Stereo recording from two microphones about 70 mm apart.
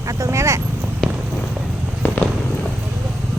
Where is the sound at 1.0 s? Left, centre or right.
Centre.